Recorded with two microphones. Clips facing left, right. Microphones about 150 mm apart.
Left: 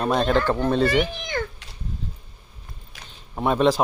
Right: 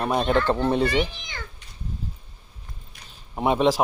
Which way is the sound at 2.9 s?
90° left.